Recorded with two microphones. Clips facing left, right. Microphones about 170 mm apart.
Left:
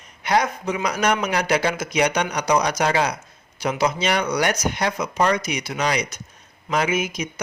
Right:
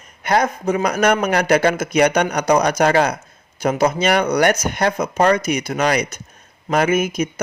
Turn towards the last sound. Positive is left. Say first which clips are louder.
# right 6 dB
turn(degrees=-50)  # may be behind; listen again after turning